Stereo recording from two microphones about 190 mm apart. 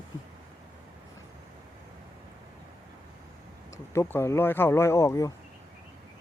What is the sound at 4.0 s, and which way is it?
Speech, 15° left (ahead or behind).